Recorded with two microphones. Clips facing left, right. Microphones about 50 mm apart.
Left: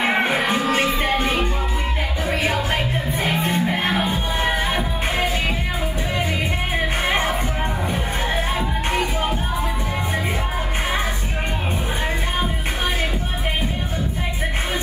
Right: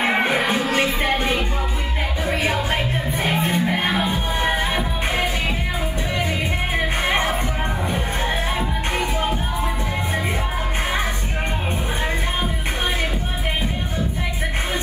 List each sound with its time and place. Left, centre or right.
3.3 s music: right
4.0 s music: left